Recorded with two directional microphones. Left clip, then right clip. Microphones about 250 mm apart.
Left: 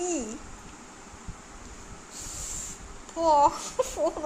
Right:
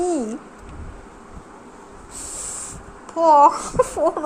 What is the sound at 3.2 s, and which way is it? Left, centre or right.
Speech, right.